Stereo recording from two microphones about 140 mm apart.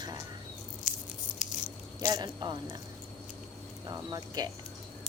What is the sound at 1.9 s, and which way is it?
Speech, 25° right (ahead or behind).